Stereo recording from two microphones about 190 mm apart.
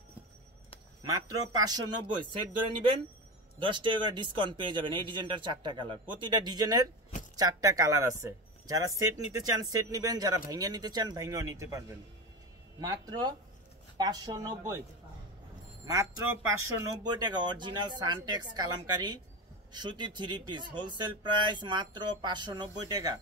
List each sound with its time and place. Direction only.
1.0 s speech: 20° right (ahead or behind)
3.5 s speech: 25° right (ahead or behind)
12.8 s speech: 20° right (ahead or behind)
15.8 s speech: 15° right (ahead or behind)